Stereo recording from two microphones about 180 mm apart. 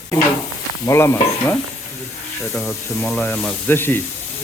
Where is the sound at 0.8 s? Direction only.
15° left (ahead or behind).